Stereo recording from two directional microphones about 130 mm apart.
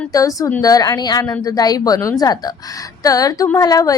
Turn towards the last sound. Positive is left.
turn(degrees=30)  # may be behind; listen again after turning